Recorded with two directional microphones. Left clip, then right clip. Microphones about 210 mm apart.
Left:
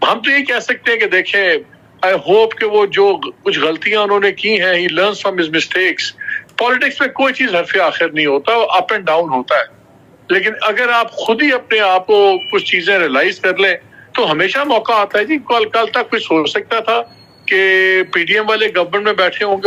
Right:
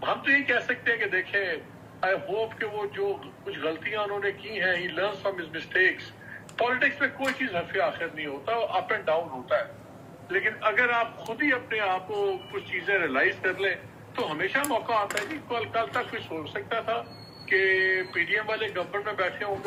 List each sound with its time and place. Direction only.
0.0 s speech: 60° left (ahead or behind)